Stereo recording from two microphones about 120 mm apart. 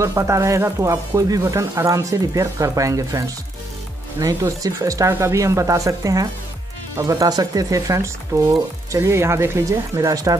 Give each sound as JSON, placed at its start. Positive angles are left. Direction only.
{"t": 0.0, "sound": "speech", "side_deg": -25}